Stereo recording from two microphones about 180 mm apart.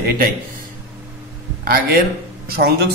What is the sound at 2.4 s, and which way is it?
Speech, 60° right (ahead or behind).